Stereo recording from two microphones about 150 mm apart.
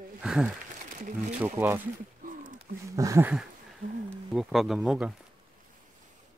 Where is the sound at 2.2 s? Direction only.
75° right (ahead or behind).